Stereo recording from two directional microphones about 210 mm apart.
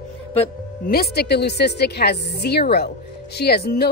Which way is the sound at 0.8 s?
45° left (ahead or behind).